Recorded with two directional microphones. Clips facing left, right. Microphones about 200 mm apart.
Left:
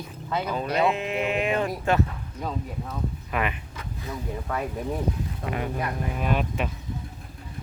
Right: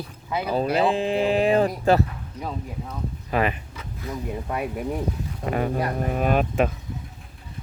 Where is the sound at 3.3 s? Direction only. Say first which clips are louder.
Right 6 dB; 35° right (ahead or behind).